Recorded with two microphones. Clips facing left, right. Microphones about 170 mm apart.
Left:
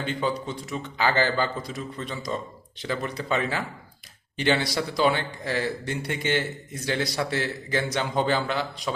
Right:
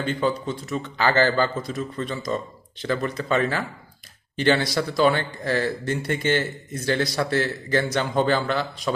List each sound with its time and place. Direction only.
0.0 s a man's voice: 15° left (ahead or behind)